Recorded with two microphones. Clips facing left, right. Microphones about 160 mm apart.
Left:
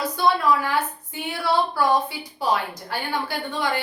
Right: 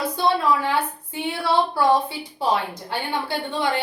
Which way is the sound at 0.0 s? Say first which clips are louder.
Even; 25° right (ahead or behind).